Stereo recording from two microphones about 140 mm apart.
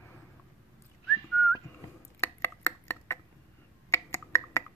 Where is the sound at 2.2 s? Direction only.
20° left (ahead or behind).